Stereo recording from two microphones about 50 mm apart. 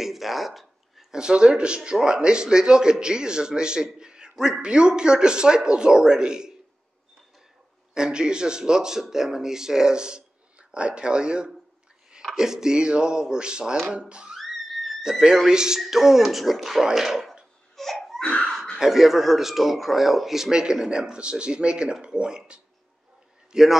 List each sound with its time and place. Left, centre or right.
0.0 s a sound: centre
1.1 s a man's voice: centre
7.9 s a man's voice: centre
14.3 s music: centre
14.9 s speech: centre
17.7 s crying: centre
18.2 s a sound: centre
18.5 s a sound: centre
18.8 s a man's voice: centre
23.5 s a man's voice: centre